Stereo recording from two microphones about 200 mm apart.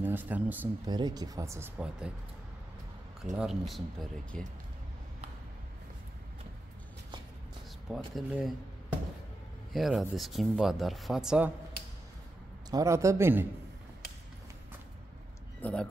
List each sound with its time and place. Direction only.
0.0 s speech: 10° right (ahead or behind)
0.8 s speech: 20° right (ahead or behind)
3.3 s speech: centre (ahead or behind)
7.9 s speech: centre (ahead or behind)
9.7 s speech: centre (ahead or behind)
12.7 s speech: 15° right (ahead or behind)
15.6 s speech: 5° left (ahead or behind)